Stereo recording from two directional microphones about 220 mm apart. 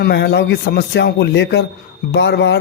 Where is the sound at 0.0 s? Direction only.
45° left (ahead or behind).